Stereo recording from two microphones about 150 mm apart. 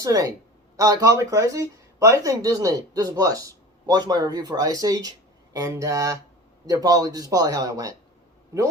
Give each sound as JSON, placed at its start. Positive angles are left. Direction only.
{"t": 0.0, "sound": "speech", "side_deg": -25}